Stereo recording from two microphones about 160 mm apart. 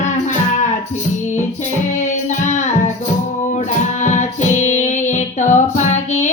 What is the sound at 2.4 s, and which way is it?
Music, 50° left (ahead or behind).